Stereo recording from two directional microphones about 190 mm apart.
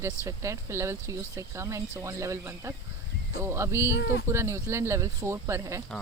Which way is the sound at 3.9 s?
65° left (ahead or behind).